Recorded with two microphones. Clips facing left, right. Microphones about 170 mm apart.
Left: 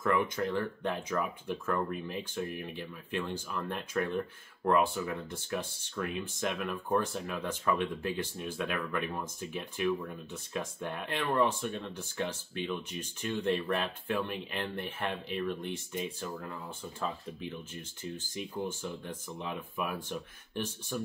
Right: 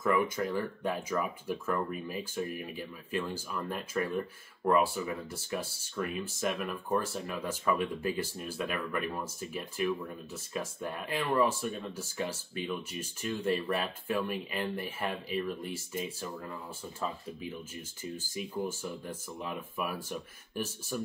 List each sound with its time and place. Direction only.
0.0 s speech: 5° right (ahead or behind)